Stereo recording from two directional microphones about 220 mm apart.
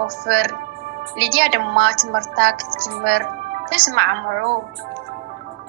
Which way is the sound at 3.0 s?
50° right (ahead or behind).